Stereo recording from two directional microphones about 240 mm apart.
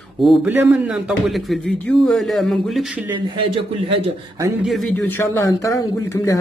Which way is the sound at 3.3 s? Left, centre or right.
Right.